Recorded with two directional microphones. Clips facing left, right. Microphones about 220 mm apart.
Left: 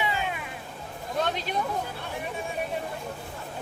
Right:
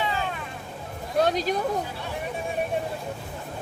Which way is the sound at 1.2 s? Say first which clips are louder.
Right 7 dB; 40° right (ahead or behind).